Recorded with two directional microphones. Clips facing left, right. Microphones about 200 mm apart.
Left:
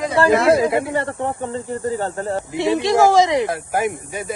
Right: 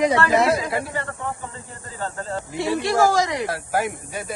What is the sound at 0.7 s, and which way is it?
Speech, 20° left (ahead or behind).